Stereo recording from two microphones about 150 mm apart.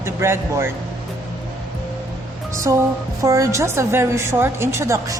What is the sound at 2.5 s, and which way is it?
A woman's voice, 20° right (ahead or behind).